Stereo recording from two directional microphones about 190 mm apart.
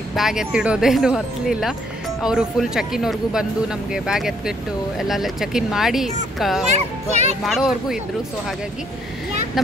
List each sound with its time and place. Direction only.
0.1 s speech: centre (ahead or behind)
7.1 s a child's voice: 35° right (ahead or behind)
7.4 s speech: centre (ahead or behind)